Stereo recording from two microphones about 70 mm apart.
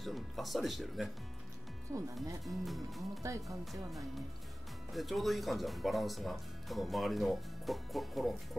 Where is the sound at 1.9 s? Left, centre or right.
Right.